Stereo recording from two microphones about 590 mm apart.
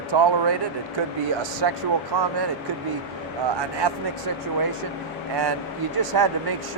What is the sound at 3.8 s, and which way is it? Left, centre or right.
Speech, right.